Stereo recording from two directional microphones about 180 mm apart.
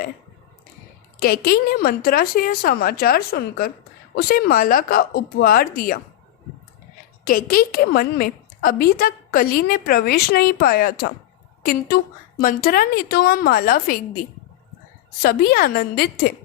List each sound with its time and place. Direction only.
1.2 s a woman's voice: 60° left (ahead or behind)
7.3 s a woman's voice: 50° left (ahead or behind)
15.2 s a woman's voice: 55° left (ahead or behind)